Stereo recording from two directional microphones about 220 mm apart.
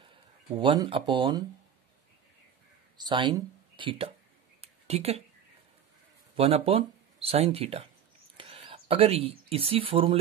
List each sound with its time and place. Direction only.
0.6 s speech: 20° right (ahead or behind)
3.0 s speech: 20° right (ahead or behind)
4.6 s a sound: 30° right (ahead or behind)
6.3 s speech: 25° right (ahead or behind)